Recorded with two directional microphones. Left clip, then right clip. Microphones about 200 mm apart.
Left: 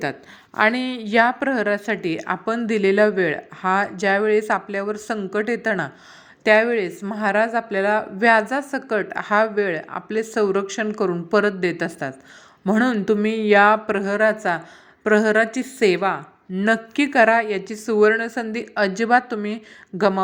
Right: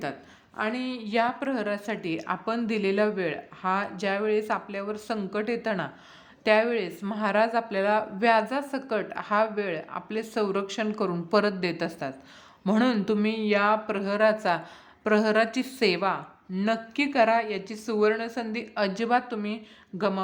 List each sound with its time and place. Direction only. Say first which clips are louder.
0.5 s a woman's voice: left 11 dB; 40° left (ahead or behind); by 20.2 s 25° left (ahead or behind)